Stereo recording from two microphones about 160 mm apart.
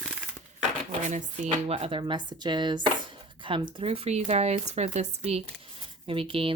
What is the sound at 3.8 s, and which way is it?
Speech, 40° right (ahead or behind).